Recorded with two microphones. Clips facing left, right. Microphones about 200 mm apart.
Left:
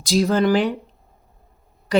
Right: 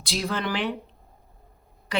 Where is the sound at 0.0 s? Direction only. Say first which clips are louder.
Left 11 dB; 40° left (ahead or behind).